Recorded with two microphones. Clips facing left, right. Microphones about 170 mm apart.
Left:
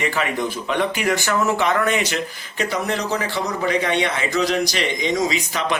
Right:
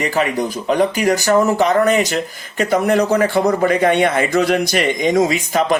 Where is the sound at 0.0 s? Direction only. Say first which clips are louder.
Right 4 dB; 40° right (ahead or behind).